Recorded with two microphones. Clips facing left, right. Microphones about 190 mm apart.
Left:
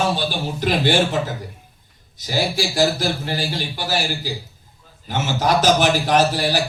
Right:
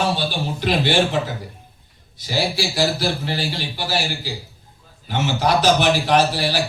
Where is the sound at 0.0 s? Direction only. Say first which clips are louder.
Even; 45° left (ahead or behind).